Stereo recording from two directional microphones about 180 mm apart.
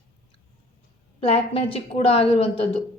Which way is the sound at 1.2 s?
30° left (ahead or behind).